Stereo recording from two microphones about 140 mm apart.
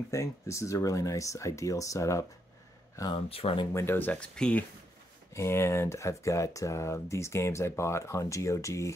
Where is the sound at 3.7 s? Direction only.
20° left (ahead or behind).